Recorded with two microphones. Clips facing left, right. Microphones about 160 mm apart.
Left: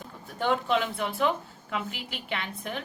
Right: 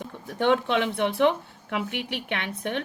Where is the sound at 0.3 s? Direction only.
65° right (ahead or behind).